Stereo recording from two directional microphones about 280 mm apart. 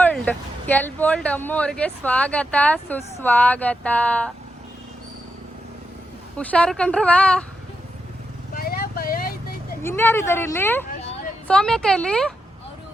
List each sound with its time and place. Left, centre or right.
0.0 s speech: centre
6.3 s speech: centre
8.5 s a sound: left
9.8 s speech: centre